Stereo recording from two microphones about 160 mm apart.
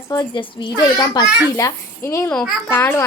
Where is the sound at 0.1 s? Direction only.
25° left (ahead or behind).